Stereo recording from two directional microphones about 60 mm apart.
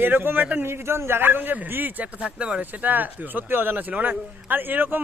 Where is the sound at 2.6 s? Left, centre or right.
Right.